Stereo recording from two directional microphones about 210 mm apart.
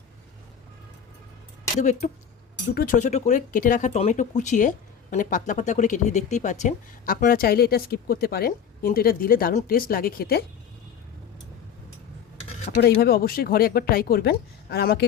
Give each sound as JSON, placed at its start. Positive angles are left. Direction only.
{"t": 1.8, "sound": "speech", "side_deg": 35}
{"t": 12.8, "sound": "speech", "side_deg": 50}